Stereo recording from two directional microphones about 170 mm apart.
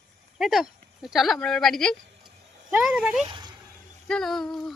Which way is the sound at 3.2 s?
30° right (ahead or behind).